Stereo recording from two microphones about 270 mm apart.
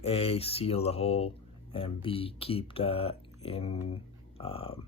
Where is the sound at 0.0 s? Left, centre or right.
Left.